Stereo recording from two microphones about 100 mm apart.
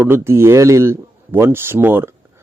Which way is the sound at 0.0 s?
25° right (ahead or behind).